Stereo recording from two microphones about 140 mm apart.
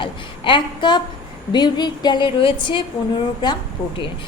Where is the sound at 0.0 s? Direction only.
35° left (ahead or behind).